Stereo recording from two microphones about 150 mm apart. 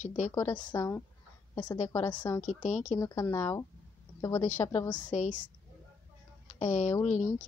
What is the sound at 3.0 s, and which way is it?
A woman's voice, 20° left (ahead or behind).